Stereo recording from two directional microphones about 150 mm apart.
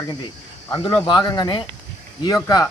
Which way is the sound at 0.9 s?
30° left (ahead or behind).